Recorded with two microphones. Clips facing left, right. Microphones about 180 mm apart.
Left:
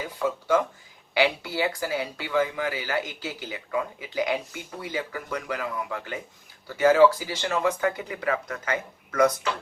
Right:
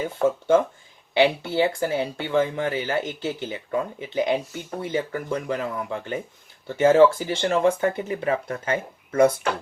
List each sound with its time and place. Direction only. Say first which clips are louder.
0.2 s speech: right 5 dB; 25° right (ahead or behind)